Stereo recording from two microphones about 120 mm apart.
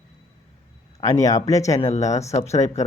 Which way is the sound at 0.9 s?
25° left (ahead or behind).